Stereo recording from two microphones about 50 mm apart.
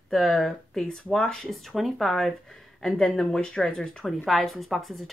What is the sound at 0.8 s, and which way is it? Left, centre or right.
Speech, centre.